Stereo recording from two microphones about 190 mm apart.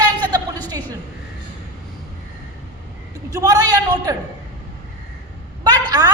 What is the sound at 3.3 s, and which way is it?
Speech, 20° right (ahead or behind).